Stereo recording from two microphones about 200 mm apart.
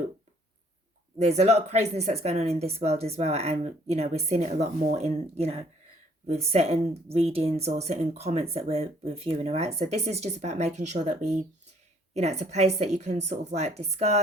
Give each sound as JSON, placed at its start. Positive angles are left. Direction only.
{"t": 1.2, "sound": "speech", "side_deg": -35}